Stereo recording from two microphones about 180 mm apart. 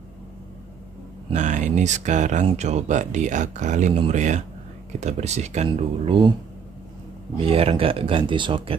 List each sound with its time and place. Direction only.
1.3 s speech: 40° right (ahead or behind)
5.7 s speech: 30° right (ahead or behind)
7.3 s speech: 30° right (ahead or behind)